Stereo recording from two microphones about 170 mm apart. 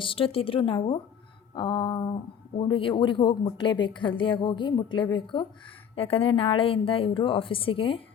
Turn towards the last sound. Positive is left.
turn(degrees=30)  # may be behind; listen again after turning